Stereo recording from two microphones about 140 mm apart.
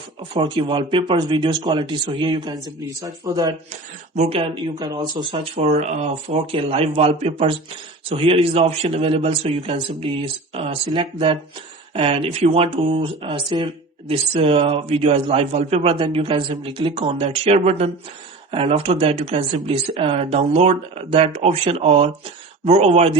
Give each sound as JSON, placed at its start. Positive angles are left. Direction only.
{"t": 0.5, "sound": "speech", "side_deg": -35}
{"t": 4.1, "sound": "speech", "side_deg": -55}
{"t": 4.4, "sound": "speech", "side_deg": -40}
{"t": 4.8, "sound": "speech", "side_deg": -30}
{"t": 5.4, "sound": "a man's voice", "side_deg": -50}